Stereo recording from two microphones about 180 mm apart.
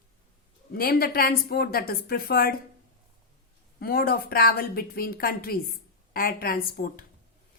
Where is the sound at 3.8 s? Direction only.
55° left (ahead or behind).